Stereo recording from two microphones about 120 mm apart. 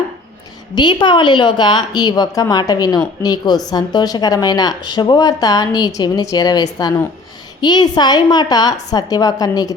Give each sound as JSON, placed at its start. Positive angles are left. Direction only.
{"t": 0.8, "sound": "a woman's voice", "side_deg": 40}